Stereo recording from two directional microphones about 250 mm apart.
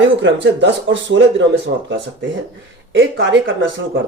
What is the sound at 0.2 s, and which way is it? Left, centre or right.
Speech, right.